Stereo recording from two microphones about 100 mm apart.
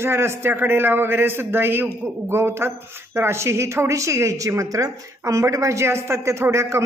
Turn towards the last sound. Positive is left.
turn(degrees=-30)  # may be behind; listen again after turning